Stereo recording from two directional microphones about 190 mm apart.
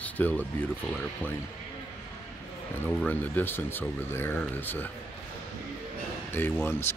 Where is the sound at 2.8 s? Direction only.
10° left (ahead or behind).